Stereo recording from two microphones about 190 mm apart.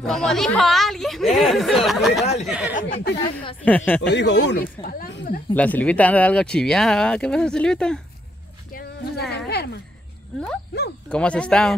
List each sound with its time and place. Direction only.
0.0 s speech: 5° left (ahead or behind)
2.7 s speech: 45° left (ahead or behind)
3.6 s speech: 10° left (ahead or behind)
4.1 s speech: 65° left (ahead or behind); by 5.4 s 50° left (ahead or behind)
5.5 s speech: 10° left (ahead or behind)
9.3 s speech: 60° left (ahead or behind)
11.1 s speech: 5° left (ahead or behind)